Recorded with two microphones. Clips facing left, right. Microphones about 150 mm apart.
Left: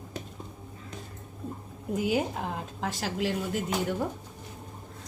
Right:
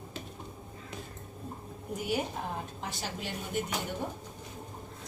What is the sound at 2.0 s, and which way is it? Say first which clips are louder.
Speech: left 5 dB; 90° left.